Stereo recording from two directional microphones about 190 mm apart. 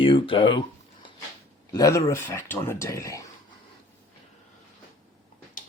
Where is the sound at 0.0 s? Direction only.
25° left (ahead or behind).